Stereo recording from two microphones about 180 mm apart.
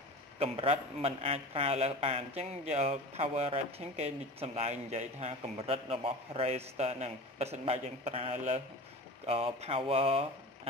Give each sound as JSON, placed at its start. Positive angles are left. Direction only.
{"t": 0.4, "sound": "a man's voice", "side_deg": -35}